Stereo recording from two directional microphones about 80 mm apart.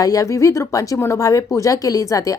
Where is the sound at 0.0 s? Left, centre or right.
Left.